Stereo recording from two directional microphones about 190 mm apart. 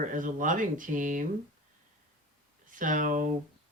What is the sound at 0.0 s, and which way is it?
Speech, 45° right (ahead or behind).